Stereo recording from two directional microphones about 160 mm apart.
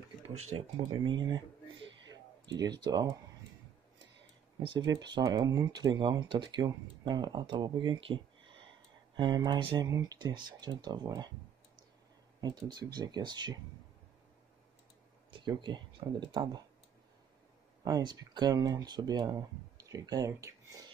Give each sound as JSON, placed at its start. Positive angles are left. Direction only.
{"t": 0.3, "sound": "speech", "side_deg": -35}
{"t": 2.8, "sound": "speech", "side_deg": -25}
{"t": 4.6, "sound": "speech", "side_deg": -25}
{"t": 12.4, "sound": "speech", "side_deg": -25}
{"t": 15.4, "sound": "speech", "side_deg": -30}
{"t": 17.8, "sound": "speech", "side_deg": -25}